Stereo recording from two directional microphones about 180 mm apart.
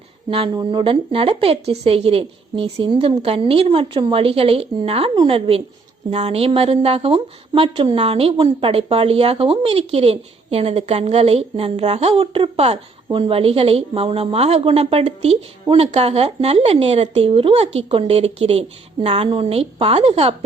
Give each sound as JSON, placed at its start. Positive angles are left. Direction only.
{"t": 0.3, "sound": "a woman's voice", "side_deg": -30}